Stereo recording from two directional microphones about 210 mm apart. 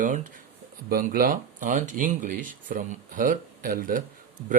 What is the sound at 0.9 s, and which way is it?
Speech, 45° right (ahead or behind).